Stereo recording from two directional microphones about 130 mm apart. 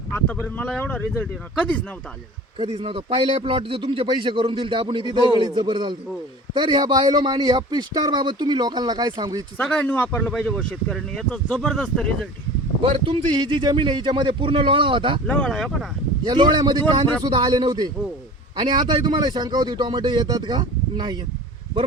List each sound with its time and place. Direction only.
0.1 s speech: 15° left (ahead or behind)
2.6 s a man's voice: 45° right (ahead or behind)
9.6 s speech: 15° left (ahead or behind)
12.8 s speech: 45° right (ahead or behind)
13.4 s a man's voice: 35° right (ahead or behind)
15.3 s speech: 5° left (ahead or behind)
16.2 s a man's voice: 35° right (ahead or behind)